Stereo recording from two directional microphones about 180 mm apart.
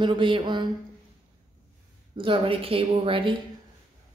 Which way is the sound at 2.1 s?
30° right (ahead or behind).